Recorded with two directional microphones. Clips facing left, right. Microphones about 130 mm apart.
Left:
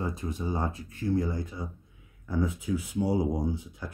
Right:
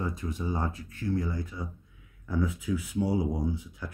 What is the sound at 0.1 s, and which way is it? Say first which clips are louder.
Speech: left 1 dB; 25° left (ahead or behind).